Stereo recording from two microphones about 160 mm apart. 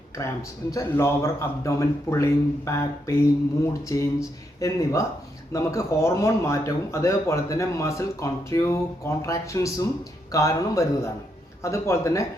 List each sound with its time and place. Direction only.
0.1 s speech: 15° left (ahead or behind)